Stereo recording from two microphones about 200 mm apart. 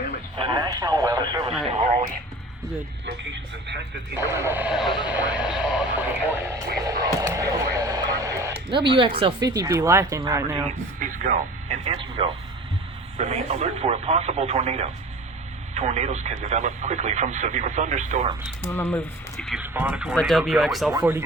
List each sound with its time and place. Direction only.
0.4 s speech: 25° right (ahead or behind)
4.1 s speech: 15° right (ahead or behind)
11.0 s speech: 40° right (ahead or behind)
18.6 s speech: 10° left (ahead or behind)
21.0 s speech: 10° right (ahead or behind)